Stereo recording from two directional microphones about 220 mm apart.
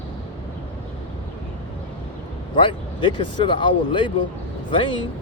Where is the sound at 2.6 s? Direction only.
20° left (ahead or behind).